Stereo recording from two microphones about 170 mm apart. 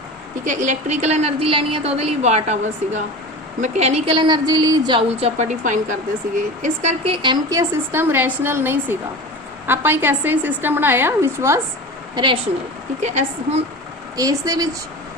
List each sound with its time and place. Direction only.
0.4 s a woman's voice: 45° right (ahead or behind); by 11.6 s 15° right (ahead or behind)
12.1 s a woman's voice: 25° right (ahead or behind)
13.0 s a woman's voice: 40° right (ahead or behind)
14.2 s speech: 20° right (ahead or behind)